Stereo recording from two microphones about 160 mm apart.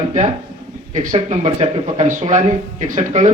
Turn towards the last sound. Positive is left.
turn(degrees=-50)  # may be behind; listen again after turning